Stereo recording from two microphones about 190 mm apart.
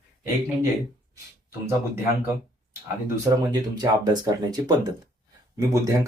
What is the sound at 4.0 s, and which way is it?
Speech, 20° right (ahead or behind).